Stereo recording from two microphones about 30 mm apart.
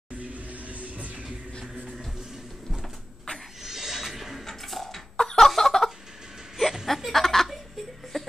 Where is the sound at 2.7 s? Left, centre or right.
Centre.